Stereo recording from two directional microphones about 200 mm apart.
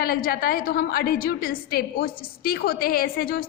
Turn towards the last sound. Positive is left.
turn(degrees=45)  # may be behind; listen again after turning